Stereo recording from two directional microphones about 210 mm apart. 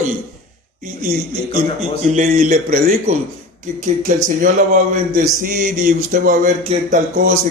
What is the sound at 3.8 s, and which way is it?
Speech, 40° right (ahead or behind).